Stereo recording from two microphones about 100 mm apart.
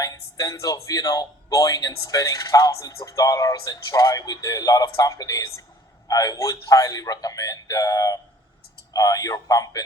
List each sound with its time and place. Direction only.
0.0 s speech: 35° left (ahead or behind)